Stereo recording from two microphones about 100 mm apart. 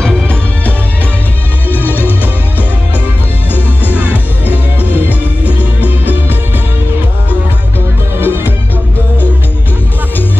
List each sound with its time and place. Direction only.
0.0 s music: 10° left (ahead or behind)
3.5 s music: 20° left (ahead or behind)
5.5 s music: 15° right (ahead or behind)
8.2 s music: 20° right (ahead or behind)